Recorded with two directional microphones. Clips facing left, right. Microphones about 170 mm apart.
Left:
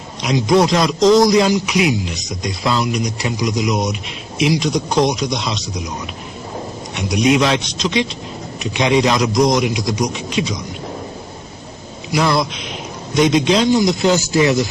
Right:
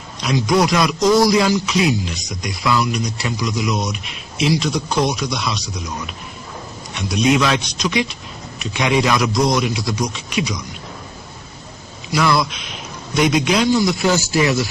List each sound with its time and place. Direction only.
0.2 s a man's voice: 20° left (ahead or behind)
7.1 s a man's voice: 20° left (ahead or behind)
13.1 s a man's voice: 25° left (ahead or behind)